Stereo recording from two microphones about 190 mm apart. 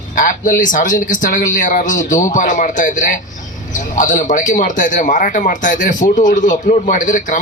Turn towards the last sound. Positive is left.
turn(degrees=45)  # may be behind; listen again after turning